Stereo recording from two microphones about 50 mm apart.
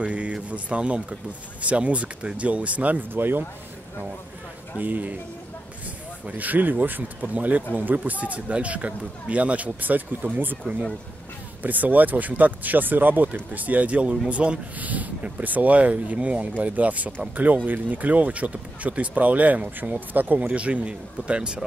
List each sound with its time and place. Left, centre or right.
0.0 s speech: right
4.7 s speech: right
6.3 s speech: right
11.6 s speech: right